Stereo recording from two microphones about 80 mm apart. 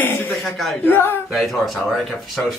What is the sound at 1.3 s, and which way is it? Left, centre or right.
Speech, centre.